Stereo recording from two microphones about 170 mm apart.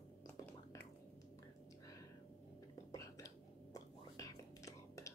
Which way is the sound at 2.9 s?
20° left (ahead or behind).